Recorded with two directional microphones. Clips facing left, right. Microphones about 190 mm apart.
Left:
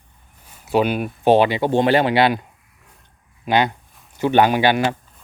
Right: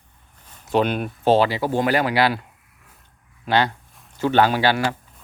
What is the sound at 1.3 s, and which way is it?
Speech, 20° left (ahead or behind).